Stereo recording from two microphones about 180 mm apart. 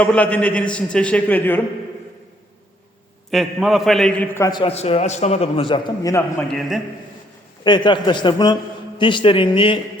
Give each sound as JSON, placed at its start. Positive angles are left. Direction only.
{"t": 0.0, "sound": "a man's voice", "side_deg": 5}
{"t": 3.3, "sound": "a man's voice", "side_deg": 0}
{"t": 4.4, "sound": "a man's voice", "side_deg": 20}
{"t": 4.6, "sound": "a man's voice", "side_deg": 35}
{"t": 6.5, "sound": "a man's voice", "side_deg": 0}
{"t": 7.6, "sound": "a man's voice", "side_deg": 25}